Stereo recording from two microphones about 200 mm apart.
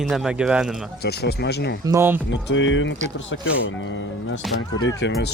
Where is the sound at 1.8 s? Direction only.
15° right (ahead or behind).